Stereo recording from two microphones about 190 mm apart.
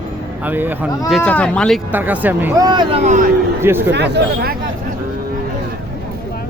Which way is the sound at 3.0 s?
40° right (ahead or behind).